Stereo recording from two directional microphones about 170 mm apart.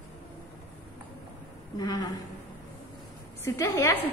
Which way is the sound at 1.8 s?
25° left (ahead or behind).